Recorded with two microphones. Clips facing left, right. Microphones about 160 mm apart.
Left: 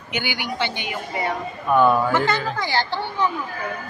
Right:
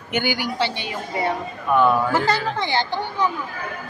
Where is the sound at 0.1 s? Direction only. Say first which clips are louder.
Right 4 dB; 45° right (ahead or behind).